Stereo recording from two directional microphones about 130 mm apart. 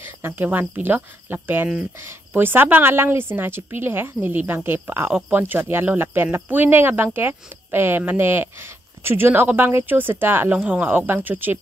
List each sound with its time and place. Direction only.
0.0 s speech: 15° right (ahead or behind)